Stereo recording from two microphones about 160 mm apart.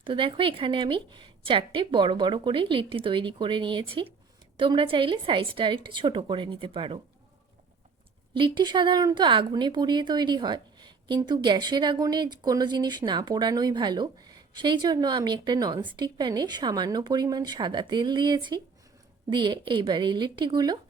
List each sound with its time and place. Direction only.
0.0 s a woman's voice: 35° right (ahead or behind)
8.3 s a woman's voice: 30° right (ahead or behind)